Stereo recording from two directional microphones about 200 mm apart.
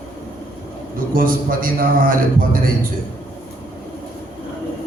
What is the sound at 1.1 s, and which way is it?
A man's voice, 45° right (ahead or behind).